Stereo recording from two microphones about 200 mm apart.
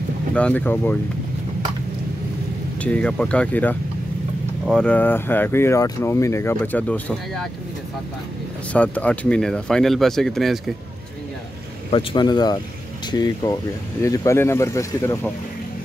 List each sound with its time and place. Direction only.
0.3 s speech: 5° left (ahead or behind)
2.8 s speech: 5° left (ahead or behind)
8.7 s speech: 5° left (ahead or behind)
11.9 s speech: 25° left (ahead or behind)